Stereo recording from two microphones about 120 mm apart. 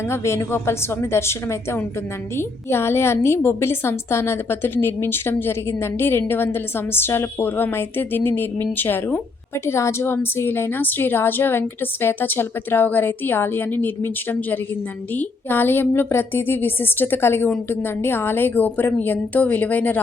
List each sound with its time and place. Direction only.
0.1 s a woman's voice: 20° left (ahead or behind)